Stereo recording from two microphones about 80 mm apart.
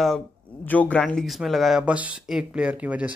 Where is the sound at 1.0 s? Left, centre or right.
Centre.